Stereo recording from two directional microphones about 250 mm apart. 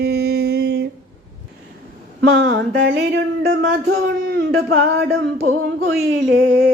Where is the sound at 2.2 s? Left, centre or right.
Right.